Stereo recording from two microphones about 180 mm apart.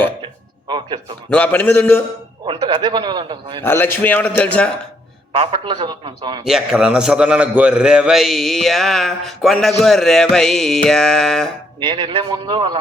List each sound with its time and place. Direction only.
1.3 s a man's voice: 10° left (ahead or behind)
2.5 s a man's voice: 25° right (ahead or behind)
3.6 s a man's voice: 10° left (ahead or behind)
5.4 s a man's voice: 25° right (ahead or behind)
6.4 s a man's voice: 5° right (ahead or behind)
11.8 s a man's voice: 25° right (ahead or behind)